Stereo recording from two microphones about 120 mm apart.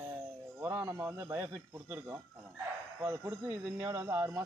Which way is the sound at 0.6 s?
20° right (ahead or behind).